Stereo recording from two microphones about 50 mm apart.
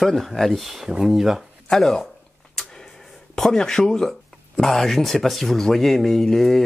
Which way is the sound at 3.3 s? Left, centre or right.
Centre.